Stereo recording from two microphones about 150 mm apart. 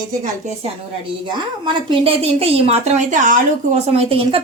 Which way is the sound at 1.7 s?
35° right (ahead or behind).